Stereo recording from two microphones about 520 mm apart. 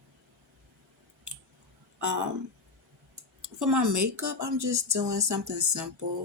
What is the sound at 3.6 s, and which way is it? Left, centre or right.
Speech, right.